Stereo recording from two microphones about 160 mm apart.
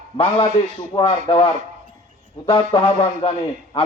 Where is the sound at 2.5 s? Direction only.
35° left (ahead or behind).